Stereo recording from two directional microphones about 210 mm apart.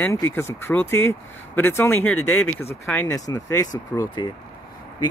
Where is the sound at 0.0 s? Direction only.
10° left (ahead or behind).